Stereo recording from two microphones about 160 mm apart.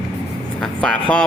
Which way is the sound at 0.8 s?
5° left (ahead or behind).